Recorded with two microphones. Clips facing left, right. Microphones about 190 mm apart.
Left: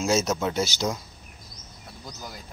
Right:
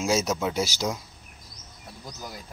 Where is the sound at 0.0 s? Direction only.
10° right (ahead or behind).